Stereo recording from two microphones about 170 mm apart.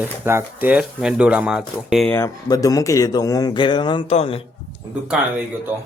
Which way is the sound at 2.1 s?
15° left (ahead or behind).